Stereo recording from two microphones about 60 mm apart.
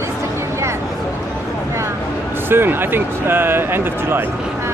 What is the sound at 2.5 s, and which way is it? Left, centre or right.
Speech, right.